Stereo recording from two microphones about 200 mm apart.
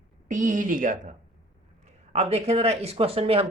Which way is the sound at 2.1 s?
30° right (ahead or behind).